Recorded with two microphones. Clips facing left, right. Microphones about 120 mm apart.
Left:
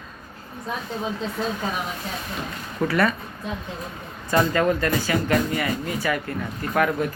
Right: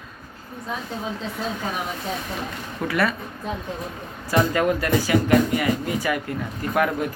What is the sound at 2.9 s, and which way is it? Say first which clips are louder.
Speech: left 1 dB; 5° right (ahead or behind).